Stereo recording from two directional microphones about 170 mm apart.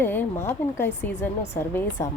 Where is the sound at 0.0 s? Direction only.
10° left (ahead or behind).